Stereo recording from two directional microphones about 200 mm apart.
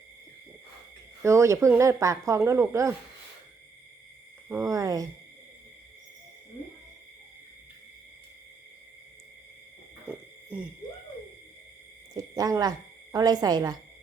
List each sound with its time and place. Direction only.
1.2 s speech: 15° right (ahead or behind)
4.4 s speech: 15° right (ahead or behind)
10.1 s hoot: 5° right (ahead or behind)
12.1 s speech: 15° right (ahead or behind)